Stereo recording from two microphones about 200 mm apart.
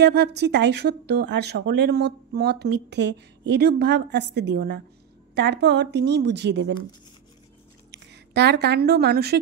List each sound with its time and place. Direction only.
0.0 s speech: 55° right (ahead or behind)
7.9 s speech: 55° right (ahead or behind)